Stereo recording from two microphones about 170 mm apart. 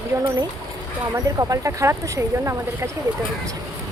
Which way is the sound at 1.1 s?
20° right (ahead or behind).